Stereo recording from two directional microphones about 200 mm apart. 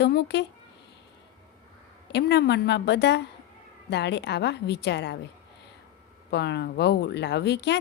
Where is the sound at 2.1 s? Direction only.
60° left (ahead or behind).